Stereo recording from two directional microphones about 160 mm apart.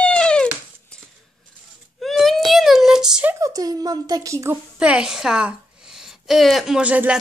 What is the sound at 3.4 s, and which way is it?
Speech, 20° right (ahead or behind).